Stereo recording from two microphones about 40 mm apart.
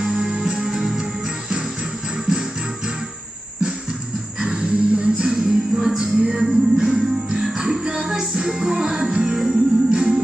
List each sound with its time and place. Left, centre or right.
0.0 s music: centre
4.4 s music: right